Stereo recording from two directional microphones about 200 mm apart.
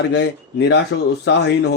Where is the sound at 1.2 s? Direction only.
55° left (ahead or behind).